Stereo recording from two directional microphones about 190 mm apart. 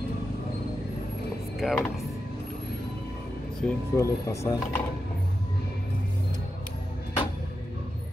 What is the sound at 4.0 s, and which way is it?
Speech, 15° left (ahead or behind).